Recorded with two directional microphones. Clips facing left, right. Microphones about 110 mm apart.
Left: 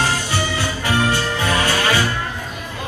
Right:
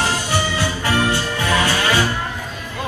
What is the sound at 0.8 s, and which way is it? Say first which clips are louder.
Music: left 1 dB; 15° left (ahead or behind).